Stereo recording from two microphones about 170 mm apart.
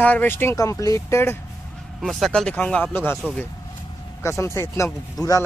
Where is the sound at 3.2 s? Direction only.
Centre (ahead or behind).